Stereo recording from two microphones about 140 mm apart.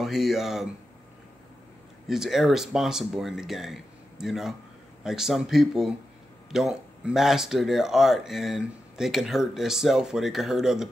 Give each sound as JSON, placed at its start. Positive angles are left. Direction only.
{"t": 0.0, "sound": "speech", "side_deg": 0}
{"t": 2.0, "sound": "speech", "side_deg": -5}